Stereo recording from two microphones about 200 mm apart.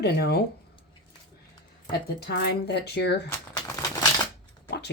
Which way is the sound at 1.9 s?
60° left (ahead or behind).